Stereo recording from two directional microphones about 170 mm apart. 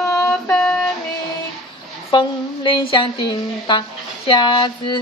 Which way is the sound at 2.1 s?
30° left (ahead or behind).